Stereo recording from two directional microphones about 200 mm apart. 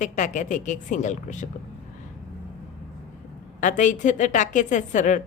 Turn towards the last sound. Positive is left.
turn(degrees=40)  # may be behind; listen again after turning